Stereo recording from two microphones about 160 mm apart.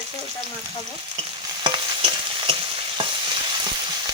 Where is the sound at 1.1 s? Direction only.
30° right (ahead or behind).